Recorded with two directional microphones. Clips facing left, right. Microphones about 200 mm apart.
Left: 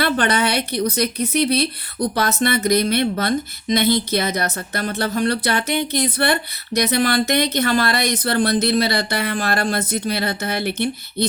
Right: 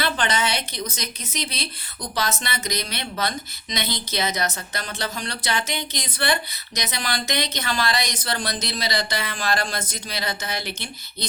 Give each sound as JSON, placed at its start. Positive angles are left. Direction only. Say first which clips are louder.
{"t": 0.0, "sound": "a woman's voice", "louder": "left 6 dB", "side_deg": 60}